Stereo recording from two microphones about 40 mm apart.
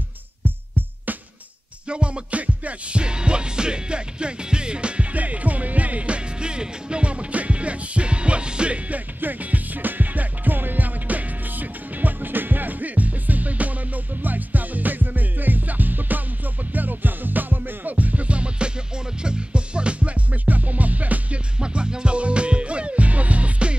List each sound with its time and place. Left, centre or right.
1.9 s music: right
3.0 s music: right
5.1 s music: right
21.5 s music: right